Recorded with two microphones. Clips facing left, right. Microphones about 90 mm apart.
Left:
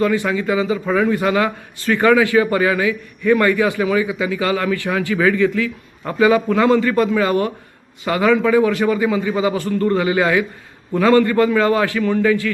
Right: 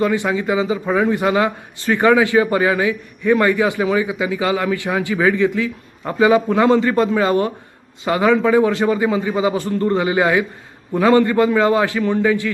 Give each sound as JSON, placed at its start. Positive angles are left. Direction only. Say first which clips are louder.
{"t": 0.0, "sound": "a man's voice", "louder": "even", "side_deg": -20}